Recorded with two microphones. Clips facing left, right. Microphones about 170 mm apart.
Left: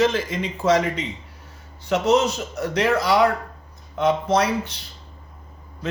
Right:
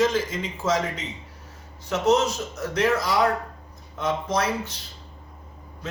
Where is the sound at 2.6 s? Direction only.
65° left (ahead or behind).